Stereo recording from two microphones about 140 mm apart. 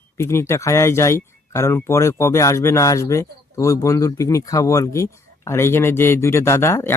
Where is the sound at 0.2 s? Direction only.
20° left (ahead or behind).